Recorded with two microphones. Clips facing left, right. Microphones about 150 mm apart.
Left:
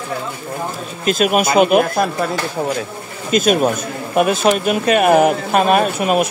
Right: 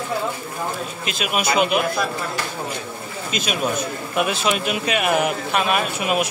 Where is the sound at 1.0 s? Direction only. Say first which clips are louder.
Left 9 dB; 45° left (ahead or behind).